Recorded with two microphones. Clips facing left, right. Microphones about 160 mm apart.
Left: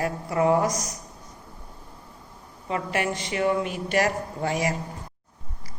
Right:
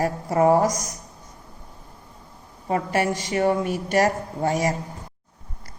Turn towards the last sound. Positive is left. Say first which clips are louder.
# right 3 dB
turn(degrees=-40)  # may be behind; listen again after turning